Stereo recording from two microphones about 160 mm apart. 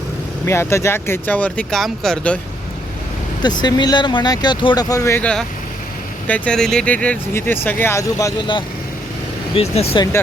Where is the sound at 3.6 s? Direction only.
25° left (ahead or behind).